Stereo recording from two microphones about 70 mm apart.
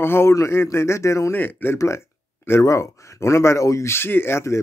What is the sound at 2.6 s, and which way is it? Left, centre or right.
Speech, left.